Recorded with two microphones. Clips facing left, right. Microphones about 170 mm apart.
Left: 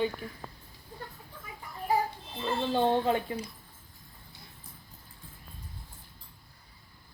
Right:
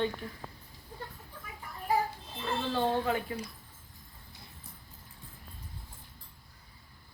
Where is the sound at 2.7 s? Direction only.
20° left (ahead or behind).